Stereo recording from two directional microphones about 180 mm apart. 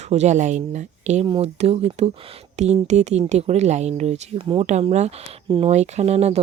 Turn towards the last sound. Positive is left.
turn(degrees=-35)  # may be behind; listen again after turning